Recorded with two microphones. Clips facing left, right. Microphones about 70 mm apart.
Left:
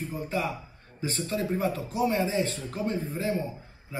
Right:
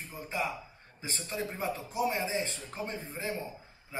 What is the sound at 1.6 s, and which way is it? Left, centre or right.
A man's voice, right.